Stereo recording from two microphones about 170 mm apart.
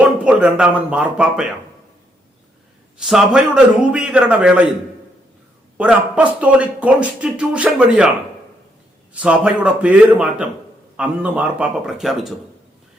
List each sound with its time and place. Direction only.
0.0 s speech: 5° right (ahead or behind)
3.1 s a man's voice: 5° right (ahead or behind)
5.7 s a man's voice: 5° right (ahead or behind)
9.1 s a man's voice: 5° right (ahead or behind)